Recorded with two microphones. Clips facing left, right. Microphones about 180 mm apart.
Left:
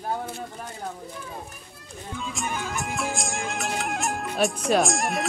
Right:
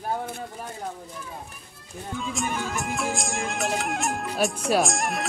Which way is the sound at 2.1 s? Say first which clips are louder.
Right 2 dB; centre (ahead or behind).